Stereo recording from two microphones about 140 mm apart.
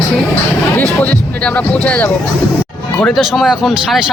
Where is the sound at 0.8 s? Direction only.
10° left (ahead or behind).